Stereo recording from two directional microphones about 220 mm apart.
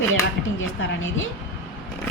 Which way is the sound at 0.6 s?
60° left (ahead or behind).